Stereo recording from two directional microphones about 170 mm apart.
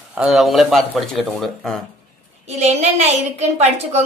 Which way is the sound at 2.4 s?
40° right (ahead or behind).